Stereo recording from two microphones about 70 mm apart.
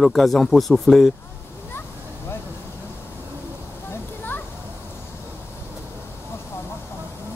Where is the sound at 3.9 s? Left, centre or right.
Left.